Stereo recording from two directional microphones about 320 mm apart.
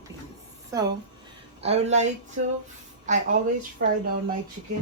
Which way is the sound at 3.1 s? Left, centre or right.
Right.